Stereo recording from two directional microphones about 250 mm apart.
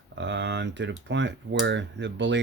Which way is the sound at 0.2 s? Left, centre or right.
Right.